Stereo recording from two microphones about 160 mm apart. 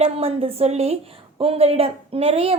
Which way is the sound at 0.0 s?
35° right (ahead or behind).